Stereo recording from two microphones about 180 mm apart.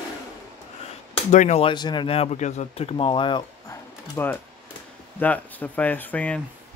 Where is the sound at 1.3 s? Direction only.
40° left (ahead or behind); by 3.8 s 25° left (ahead or behind).